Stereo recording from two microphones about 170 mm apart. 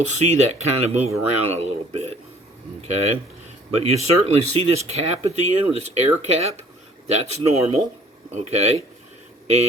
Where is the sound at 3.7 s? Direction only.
40° right (ahead or behind).